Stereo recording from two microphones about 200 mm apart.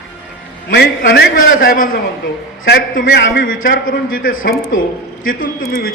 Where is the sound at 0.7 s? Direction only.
45° left (ahead or behind).